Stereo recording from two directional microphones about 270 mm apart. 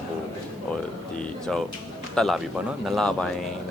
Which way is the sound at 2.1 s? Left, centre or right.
Centre.